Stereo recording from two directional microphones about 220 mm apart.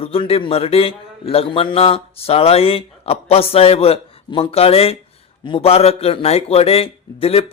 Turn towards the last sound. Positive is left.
turn(degrees=25)  # may be behind; listen again after turning